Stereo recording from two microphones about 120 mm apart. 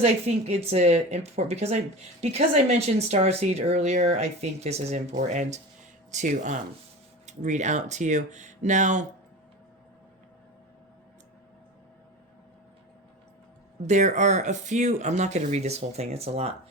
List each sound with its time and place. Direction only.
0.0 s speech: 65° right (ahead or behind); by 9.0 s 90° right
13.8 s speech: 80° right; by 16.5 s 60° right (ahead or behind)